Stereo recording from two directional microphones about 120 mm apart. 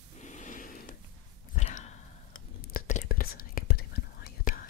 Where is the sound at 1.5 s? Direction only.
70° left (ahead or behind).